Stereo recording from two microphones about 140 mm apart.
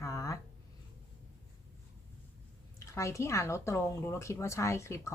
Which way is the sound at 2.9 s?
20° left (ahead or behind).